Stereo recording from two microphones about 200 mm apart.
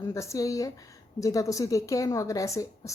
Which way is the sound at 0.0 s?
15° left (ahead or behind).